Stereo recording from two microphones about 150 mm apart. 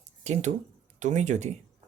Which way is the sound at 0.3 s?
50° right (ahead or behind).